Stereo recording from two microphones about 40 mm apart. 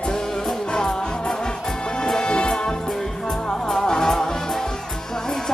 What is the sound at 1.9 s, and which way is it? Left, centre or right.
Music, centre.